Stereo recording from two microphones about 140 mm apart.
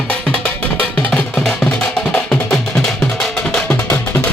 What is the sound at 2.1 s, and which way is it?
Music, 5° left (ahead or behind).